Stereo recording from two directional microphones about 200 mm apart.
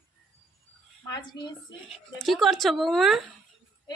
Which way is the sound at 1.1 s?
20° left (ahead or behind).